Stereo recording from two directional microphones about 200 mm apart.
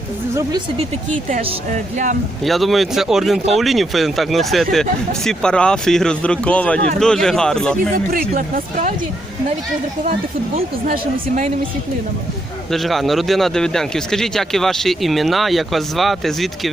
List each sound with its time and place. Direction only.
1.3 s speech: 35° right (ahead or behind)
2.4 s speech: centre (ahead or behind)
8.3 s speech: 45° right (ahead or behind)
10.8 s speech: 40° right (ahead or behind)
12.7 s speech: centre (ahead or behind)